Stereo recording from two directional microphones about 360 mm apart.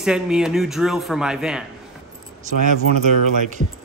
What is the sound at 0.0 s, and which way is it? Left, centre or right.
Speech, centre.